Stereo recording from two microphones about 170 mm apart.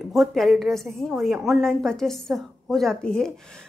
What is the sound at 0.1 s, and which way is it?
A woman's voice, centre (ahead or behind).